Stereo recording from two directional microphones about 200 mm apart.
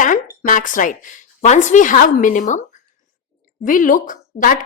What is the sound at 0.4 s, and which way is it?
A woman's voice, 40° left (ahead or behind).